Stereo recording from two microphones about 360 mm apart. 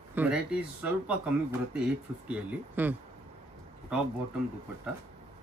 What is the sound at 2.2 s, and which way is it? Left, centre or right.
Speech, centre.